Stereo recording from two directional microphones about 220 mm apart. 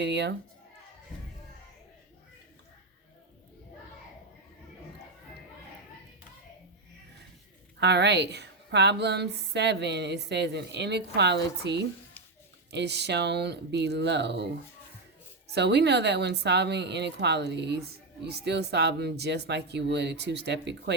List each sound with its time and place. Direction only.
0.0 s a woman's voice: 50° right (ahead or behind)
7.8 s a woman's voice: 50° right (ahead or behind)
15.5 s a woman's voice: 50° right (ahead or behind)